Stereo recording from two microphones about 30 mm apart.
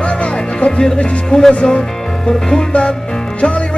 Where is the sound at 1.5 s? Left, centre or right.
Left.